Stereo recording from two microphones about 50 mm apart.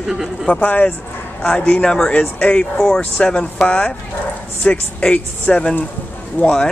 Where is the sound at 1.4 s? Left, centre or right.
Centre.